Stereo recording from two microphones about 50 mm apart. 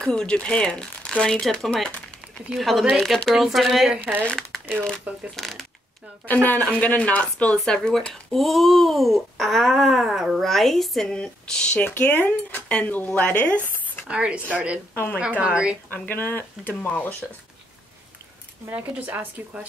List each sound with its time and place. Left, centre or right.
0.0 s speech: centre
2.5 s a child's voice: centre
4.0 s speech: right
4.3 s crumpling: centre
5.3 s speech: centre
6.2 s speech: left
7.5 s speech: centre
8.1 s a child's voice: centre
10.4 s speech: centre
12.0 s speech: left
14.0 s a woman's voice: right
15.9 s speech: left
18.7 s speech: right